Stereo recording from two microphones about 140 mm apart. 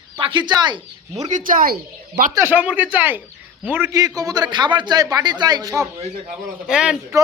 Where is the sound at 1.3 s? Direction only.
75° right (ahead or behind).